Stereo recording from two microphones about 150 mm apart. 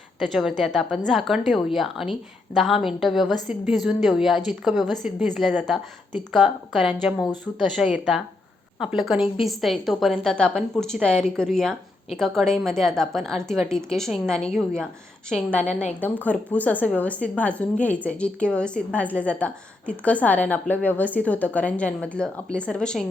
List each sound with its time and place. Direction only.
0.2 s a woman's voice: centre (ahead or behind)